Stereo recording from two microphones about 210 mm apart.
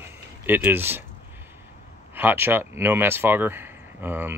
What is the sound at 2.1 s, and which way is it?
Speech, 10° right (ahead or behind).